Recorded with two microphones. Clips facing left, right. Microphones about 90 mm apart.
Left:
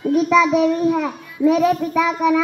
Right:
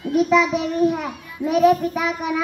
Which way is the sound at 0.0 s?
35° left (ahead or behind).